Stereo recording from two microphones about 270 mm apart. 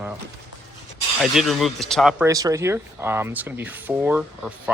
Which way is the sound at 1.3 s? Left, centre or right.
Centre.